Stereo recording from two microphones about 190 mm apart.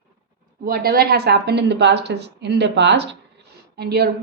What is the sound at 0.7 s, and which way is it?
A woman's voice, 55° right (ahead or behind).